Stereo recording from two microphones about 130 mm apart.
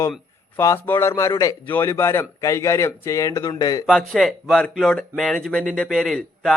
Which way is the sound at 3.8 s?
5° left (ahead or behind).